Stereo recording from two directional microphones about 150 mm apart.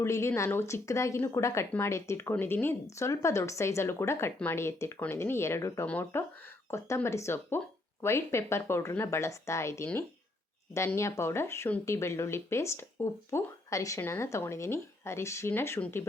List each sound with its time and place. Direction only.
0.0 s speech: 15° left (ahead or behind)